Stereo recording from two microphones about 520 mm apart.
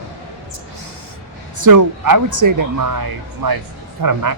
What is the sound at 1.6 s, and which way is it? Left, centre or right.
Speech, right.